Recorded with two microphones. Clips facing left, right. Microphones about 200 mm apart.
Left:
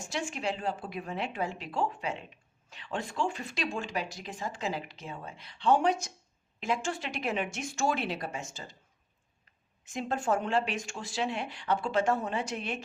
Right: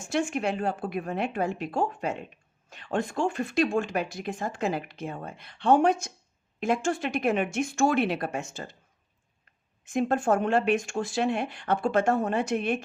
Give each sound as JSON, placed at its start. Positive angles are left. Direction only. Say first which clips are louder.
{"t": 0.0, "sound": "speech", "louder": "right 7 dB", "side_deg": -55}
{"t": 9.8, "sound": "speech", "louder": "right 7 dB", "side_deg": -55}